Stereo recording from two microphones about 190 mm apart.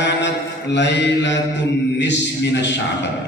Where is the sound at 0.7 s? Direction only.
65° left (ahead or behind).